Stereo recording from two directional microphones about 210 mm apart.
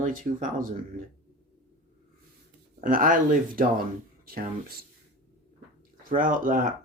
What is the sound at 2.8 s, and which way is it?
Speech, 40° right (ahead or behind).